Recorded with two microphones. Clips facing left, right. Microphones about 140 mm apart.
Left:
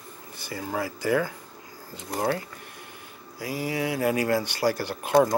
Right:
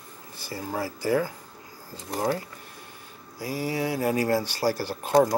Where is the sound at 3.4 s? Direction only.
35° right (ahead or behind).